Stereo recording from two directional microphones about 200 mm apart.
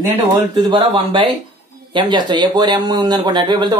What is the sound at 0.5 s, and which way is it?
Speech, 25° right (ahead or behind).